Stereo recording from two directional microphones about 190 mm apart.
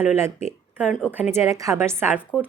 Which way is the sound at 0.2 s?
15° right (ahead or behind).